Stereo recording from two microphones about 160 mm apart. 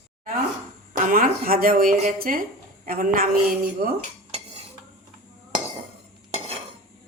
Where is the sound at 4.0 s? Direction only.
40° right (ahead or behind).